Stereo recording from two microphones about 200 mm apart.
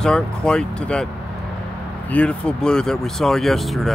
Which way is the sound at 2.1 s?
5° left (ahead or behind).